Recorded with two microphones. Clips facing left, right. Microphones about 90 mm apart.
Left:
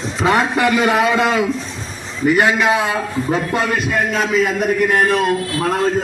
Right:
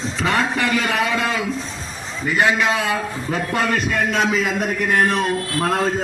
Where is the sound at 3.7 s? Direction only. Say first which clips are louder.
Left 1 dB; 5° left (ahead or behind).